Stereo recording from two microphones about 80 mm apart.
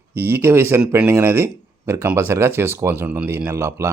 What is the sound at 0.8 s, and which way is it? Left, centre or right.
Speech, centre.